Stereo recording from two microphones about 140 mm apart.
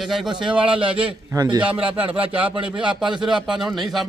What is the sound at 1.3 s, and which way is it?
A man's voice, 30° right (ahead or behind).